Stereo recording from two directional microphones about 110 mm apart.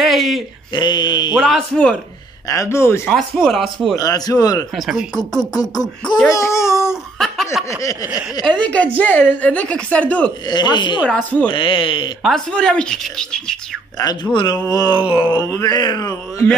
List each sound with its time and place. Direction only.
0.0 s a sound: centre (ahead or behind)
0.7 s speech: 45° left (ahead or behind)
1.4 s speech: 5° left (ahead or behind)
2.4 s speech: 30° left (ahead or behind)
3.1 s speech: centre (ahead or behind)
3.9 s speech: 30° left (ahead or behind)
4.7 s speech: 5° right (ahead or behind)
5.4 s speech: 35° left (ahead or behind)
7.2 s speech: centre (ahead or behind)
8.5 s a woman's voice: 10° left (ahead or behind)
10.5 s speech: 45° left (ahead or behind)
12.5 s speech: 5° left (ahead or behind)
13.9 s speech: 35° left (ahead or behind)
15.3 s speech: 30° left (ahead or behind)